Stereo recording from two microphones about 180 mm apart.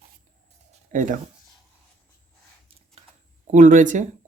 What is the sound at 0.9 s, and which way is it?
Speech, 45° right (ahead or behind).